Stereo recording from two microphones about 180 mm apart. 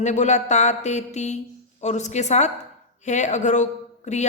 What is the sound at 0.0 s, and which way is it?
A woman's voice, 40° left (ahead or behind).